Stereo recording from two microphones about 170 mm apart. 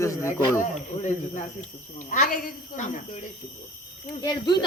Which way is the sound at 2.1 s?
55° left (ahead or behind).